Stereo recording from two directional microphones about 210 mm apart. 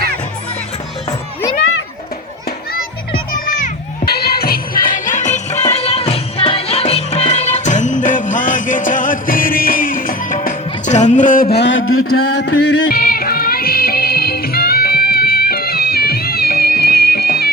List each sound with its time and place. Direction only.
3.6 s crowd: 50° left (ahead or behind)
11.6 s a sound: 65° left (ahead or behind); by 12.4 s 90° left
12.6 s music: 50° left (ahead or behind)